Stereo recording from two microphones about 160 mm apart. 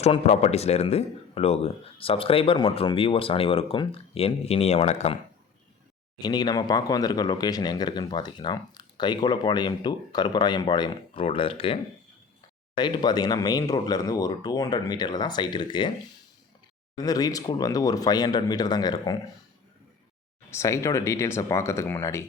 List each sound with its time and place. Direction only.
0.0 s speech: 45° left (ahead or behind)
6.1 s speech: 25° left (ahead or behind)
17.0 s speech: 25° left (ahead or behind)
20.5 s speech: 20° left (ahead or behind)